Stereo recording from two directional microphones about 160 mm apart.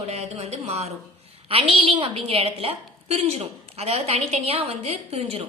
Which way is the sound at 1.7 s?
35° right (ahead or behind).